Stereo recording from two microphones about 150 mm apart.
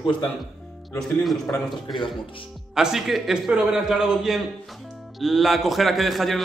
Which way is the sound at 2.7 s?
5° right (ahead or behind).